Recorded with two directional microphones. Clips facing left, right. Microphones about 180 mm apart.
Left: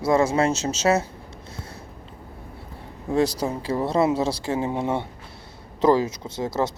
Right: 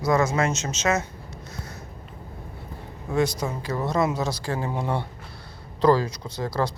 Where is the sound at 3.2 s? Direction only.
35° left (ahead or behind).